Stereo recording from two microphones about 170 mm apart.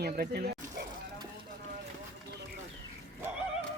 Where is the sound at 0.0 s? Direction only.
70° right (ahead or behind).